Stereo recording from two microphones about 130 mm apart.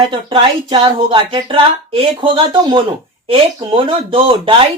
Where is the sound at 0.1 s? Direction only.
40° right (ahead or behind).